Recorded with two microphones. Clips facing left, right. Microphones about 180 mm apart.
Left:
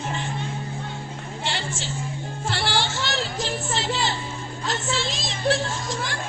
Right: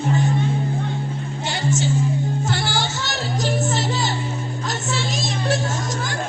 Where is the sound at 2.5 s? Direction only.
45° right (ahead or behind).